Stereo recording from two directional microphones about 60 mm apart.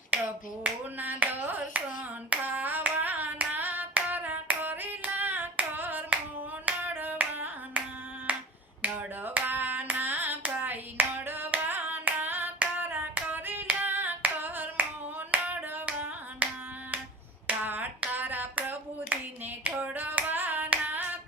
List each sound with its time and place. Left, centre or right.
0.1 s finger snapping: right
0.9 s hands: right
6.7 s a sound: right
8.3 s finger snapping: right
9.2 s hands: right
12.5 s clapping: right
13.1 s hands: right
17.4 s finger snapping: right
18.1 s hands: right